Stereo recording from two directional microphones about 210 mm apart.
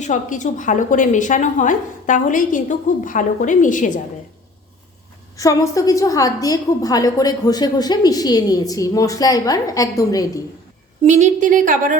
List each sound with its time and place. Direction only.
0.0 s a woman's voice: 35° left (ahead or behind)
5.4 s a woman's voice: 15° left (ahead or behind)
11.0 s a woman's voice: 35° right (ahead or behind)